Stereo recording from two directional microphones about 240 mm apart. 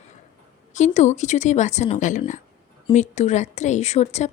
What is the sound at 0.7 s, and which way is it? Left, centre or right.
A woman's voice, left.